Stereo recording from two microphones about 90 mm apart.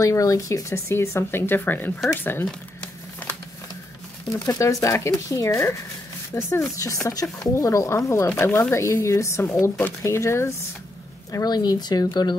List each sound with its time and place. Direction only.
0.0 s speech: 35° left (ahead or behind)
4.3 s speech: 35° left (ahead or behind); by 9.9 s 20° left (ahead or behind)
10.0 s speech: 30° left (ahead or behind)
11.3 s speech: 45° left (ahead or behind)